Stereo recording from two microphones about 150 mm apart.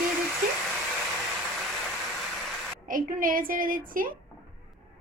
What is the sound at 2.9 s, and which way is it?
A woman's voice, 65° right (ahead or behind).